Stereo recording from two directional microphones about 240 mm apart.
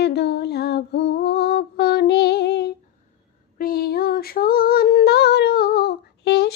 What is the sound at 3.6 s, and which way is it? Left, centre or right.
Female singing, left.